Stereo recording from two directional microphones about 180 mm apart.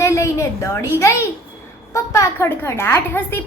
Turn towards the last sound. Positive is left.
turn(degrees=15)  # may be behind; listen again after turning